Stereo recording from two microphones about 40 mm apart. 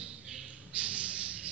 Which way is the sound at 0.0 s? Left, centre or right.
Centre.